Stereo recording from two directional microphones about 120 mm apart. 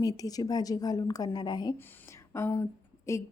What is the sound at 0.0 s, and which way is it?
A woman's voice, 30° left (ahead or behind).